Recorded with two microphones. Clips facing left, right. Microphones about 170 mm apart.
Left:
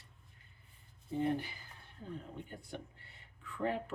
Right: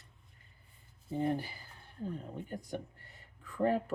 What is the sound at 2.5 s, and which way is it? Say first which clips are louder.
Speech: right 6 dB; 40° right (ahead or behind).